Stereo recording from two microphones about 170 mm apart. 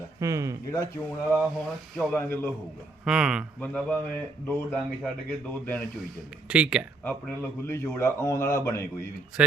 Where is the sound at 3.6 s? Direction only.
5° left (ahead or behind).